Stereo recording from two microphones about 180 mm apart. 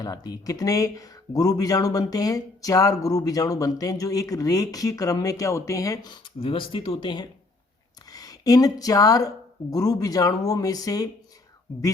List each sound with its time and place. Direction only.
0.0 s a woman's voice: 20° left (ahead or behind)